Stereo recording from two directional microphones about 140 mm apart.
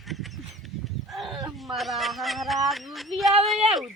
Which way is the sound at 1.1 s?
Centre (ahead or behind).